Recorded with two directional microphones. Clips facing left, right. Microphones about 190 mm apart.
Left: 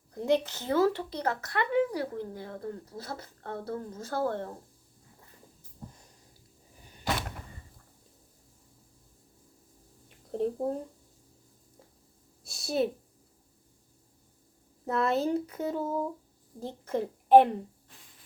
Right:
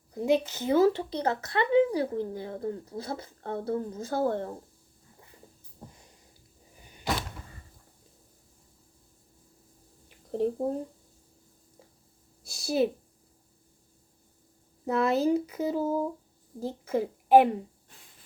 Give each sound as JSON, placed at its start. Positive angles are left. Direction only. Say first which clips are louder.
{"t": 0.1, "sound": "speech", "louder": "right 2 dB", "side_deg": -5}
{"t": 10.3, "sound": "speech", "louder": "right 2 dB", "side_deg": 0}
{"t": 12.5, "sound": "a sound", "louder": "right 3 dB", "side_deg": 0}
{"t": 14.8, "sound": "speech", "louder": "right 3 dB", "side_deg": 0}